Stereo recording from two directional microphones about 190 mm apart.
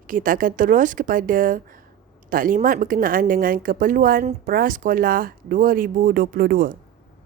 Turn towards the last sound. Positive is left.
turn(degrees=-50)  # may be behind; listen again after turning